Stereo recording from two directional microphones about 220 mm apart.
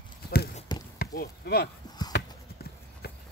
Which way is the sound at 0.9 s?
45° left (ahead or behind).